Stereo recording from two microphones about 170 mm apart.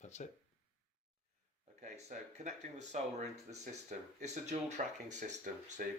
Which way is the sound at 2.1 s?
45° right (ahead or behind).